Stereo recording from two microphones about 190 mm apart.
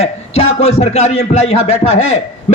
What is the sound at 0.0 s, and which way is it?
A man's voice, 35° left (ahead or behind).